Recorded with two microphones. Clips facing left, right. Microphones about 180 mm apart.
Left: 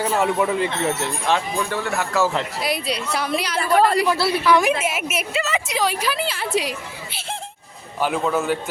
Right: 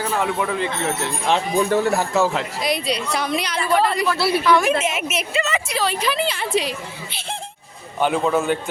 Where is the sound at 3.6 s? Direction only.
40° left (ahead or behind).